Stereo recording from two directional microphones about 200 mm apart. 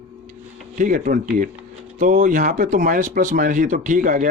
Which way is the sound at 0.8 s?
40° right (ahead or behind).